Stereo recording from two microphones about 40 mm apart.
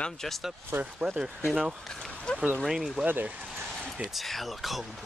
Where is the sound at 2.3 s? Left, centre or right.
Left.